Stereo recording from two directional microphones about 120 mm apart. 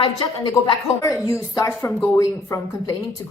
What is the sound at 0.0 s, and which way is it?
A woman's voice, 35° left (ahead or behind).